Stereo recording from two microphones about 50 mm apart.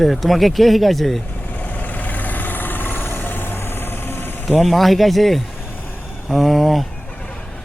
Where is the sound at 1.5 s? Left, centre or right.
Left.